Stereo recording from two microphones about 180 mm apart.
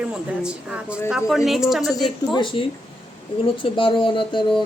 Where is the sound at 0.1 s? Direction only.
5° right (ahead or behind).